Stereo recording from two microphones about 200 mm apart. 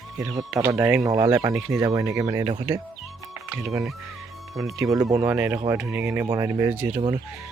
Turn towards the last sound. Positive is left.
turn(degrees=-5)  # may be behind; listen again after turning